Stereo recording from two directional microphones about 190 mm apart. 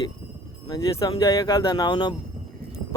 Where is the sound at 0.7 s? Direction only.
15° left (ahead or behind).